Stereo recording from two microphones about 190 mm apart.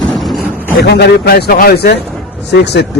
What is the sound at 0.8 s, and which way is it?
A man's voice, 60° left (ahead or behind).